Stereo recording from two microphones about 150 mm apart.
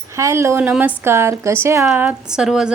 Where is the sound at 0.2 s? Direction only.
20° right (ahead or behind).